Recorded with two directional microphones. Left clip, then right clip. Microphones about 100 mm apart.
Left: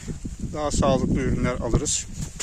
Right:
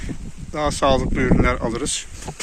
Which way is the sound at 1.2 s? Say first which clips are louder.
Right 7 dB; 40° left (ahead or behind).